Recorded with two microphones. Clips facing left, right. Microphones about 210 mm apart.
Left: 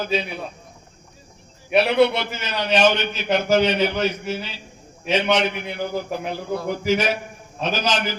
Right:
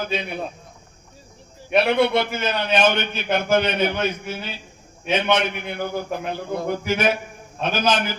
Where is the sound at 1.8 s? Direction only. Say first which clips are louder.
Left 1 dB; 55° right (ahead or behind).